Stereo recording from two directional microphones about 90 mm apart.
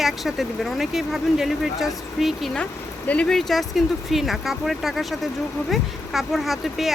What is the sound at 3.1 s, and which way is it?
Speech, 10° left (ahead or behind).